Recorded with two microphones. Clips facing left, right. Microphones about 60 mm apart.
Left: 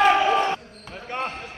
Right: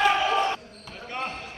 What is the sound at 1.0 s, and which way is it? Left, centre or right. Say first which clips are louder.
Basketball bounce: left 3 dB; left.